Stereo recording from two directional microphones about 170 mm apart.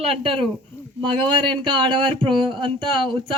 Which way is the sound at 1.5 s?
30° right (ahead or behind).